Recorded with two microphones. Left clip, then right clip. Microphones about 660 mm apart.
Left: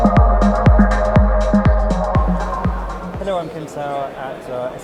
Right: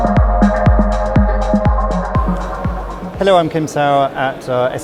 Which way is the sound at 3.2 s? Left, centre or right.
Right.